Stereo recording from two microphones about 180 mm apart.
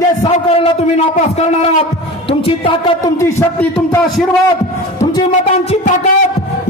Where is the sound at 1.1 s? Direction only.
40° left (ahead or behind).